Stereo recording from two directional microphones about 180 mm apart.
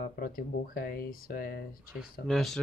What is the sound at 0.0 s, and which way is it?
Speech, 50° left (ahead or behind).